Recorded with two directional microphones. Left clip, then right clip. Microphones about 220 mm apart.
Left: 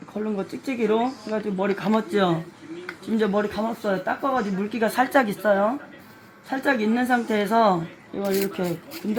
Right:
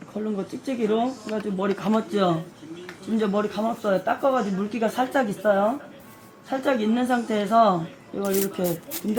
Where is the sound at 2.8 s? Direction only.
15° left (ahead or behind).